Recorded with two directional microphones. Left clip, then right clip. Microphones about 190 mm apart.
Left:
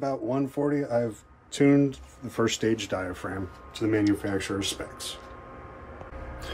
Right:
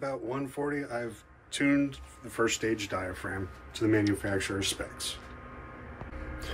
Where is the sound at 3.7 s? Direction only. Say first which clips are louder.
Left 2 dB; 20° left (ahead or behind).